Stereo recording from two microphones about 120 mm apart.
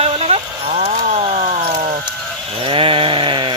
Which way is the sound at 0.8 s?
65° right (ahead or behind).